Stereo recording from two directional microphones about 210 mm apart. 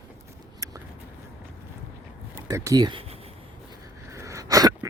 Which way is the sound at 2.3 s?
15° right (ahead or behind).